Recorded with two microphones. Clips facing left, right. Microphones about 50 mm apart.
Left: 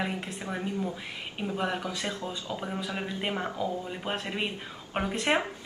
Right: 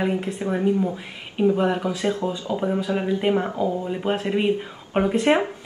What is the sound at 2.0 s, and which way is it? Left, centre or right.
Speech, right.